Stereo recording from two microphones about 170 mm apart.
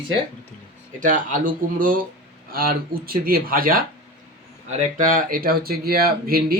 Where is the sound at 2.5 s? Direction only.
60° right (ahead or behind).